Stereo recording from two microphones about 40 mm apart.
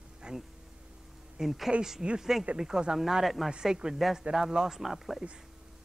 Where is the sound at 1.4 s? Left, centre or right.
Centre.